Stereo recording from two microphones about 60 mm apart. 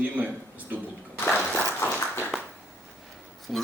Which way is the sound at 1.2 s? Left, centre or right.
Left.